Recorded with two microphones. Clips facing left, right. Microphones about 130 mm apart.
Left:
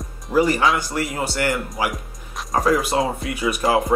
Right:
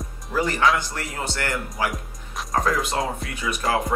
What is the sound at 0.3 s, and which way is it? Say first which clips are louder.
Speech: left 3 dB; 10° left (ahead or behind).